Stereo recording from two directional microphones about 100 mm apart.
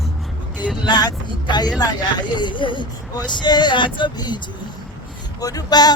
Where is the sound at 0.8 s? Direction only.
45° left (ahead or behind).